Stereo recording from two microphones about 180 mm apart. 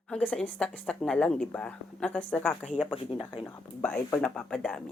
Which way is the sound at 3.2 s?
30° left (ahead or behind).